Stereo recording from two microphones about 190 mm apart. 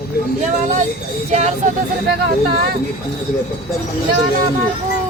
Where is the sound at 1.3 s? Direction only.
35° right (ahead or behind).